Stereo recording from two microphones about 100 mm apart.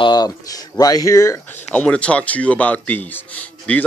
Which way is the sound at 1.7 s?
10° left (ahead or behind).